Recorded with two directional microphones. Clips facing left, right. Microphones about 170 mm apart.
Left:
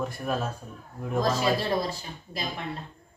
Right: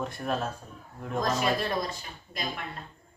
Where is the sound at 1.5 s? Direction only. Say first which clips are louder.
Left 3 dB; 30° left (ahead or behind).